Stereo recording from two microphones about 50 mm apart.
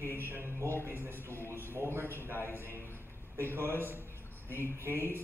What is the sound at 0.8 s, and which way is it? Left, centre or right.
Speech, right.